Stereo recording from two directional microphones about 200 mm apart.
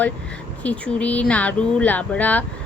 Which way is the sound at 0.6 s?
5° left (ahead or behind).